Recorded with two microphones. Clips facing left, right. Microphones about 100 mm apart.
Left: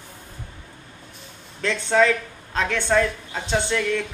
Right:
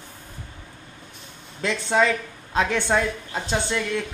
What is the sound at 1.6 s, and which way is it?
Speech, 15° right (ahead or behind).